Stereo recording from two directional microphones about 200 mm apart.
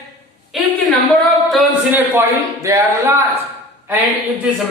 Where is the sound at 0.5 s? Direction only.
Centre (ahead or behind).